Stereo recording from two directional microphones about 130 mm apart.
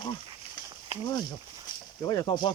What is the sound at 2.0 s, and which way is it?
Speech, 30° left (ahead or behind).